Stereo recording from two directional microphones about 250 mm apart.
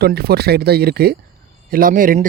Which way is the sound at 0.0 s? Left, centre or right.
Right.